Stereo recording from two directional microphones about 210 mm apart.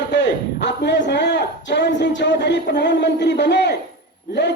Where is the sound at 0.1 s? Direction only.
55° left (ahead or behind).